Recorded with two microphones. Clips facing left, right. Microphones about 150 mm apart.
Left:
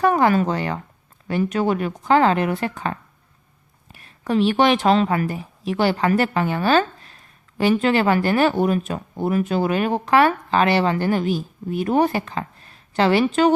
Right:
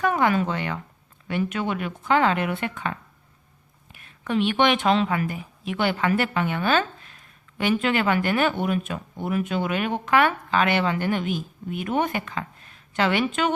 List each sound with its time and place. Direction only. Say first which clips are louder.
0.0 s a woman's voice: left 5 dB; 40° left (ahead or behind)